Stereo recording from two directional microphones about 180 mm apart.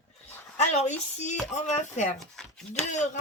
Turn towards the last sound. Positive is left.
turn(degrees=40)  # may be behind; listen again after turning